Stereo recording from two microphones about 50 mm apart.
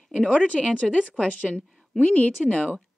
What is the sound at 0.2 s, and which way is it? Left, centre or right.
Speech, left.